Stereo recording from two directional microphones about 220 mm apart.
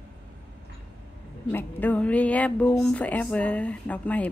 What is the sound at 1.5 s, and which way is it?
Speech, 5° left (ahead or behind).